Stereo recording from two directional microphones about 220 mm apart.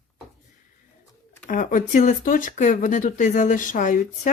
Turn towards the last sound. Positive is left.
turn(degrees=35)  # may be behind; listen again after turning